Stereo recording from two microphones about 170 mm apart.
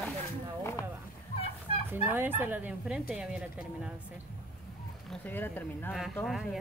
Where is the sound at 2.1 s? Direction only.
10° right (ahead or behind).